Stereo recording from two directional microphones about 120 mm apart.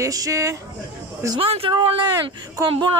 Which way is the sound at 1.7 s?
40° right (ahead or behind).